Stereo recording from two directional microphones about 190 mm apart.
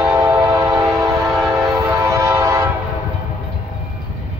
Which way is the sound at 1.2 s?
Centre (ahead or behind).